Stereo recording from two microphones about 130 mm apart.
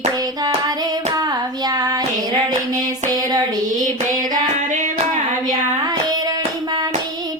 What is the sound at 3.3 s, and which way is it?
Child singing, 30° right (ahead or behind).